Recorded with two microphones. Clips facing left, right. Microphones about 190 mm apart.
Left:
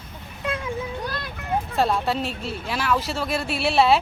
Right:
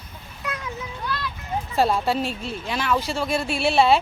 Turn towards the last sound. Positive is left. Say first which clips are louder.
# right 1 dB
turn(degrees=0)  # may be behind; listen again after turning